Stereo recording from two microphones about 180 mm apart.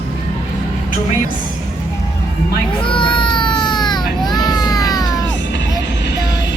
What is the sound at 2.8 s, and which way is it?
Baby cry, 30° left (ahead or behind).